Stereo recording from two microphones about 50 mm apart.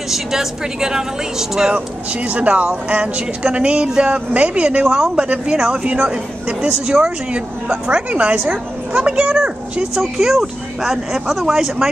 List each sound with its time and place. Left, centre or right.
0.1 s speech: centre
2.2 s speech: right
4.8 s speech: centre
5.1 s speech: centre
10.1 s speech: centre